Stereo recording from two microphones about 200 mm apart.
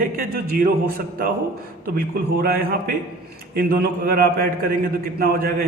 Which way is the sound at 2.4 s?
45° right (ahead or behind).